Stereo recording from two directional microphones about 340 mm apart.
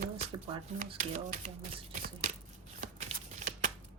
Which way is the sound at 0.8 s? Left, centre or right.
Right.